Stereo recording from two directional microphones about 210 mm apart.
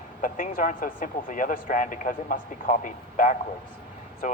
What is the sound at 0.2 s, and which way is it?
A man's voice, 40° left (ahead or behind).